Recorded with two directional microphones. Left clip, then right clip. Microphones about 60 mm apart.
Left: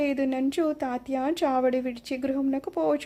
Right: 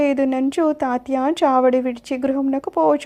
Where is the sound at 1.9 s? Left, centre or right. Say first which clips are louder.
Right 8 dB; right.